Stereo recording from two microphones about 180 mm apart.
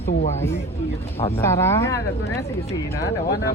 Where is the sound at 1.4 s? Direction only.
15° left (ahead or behind).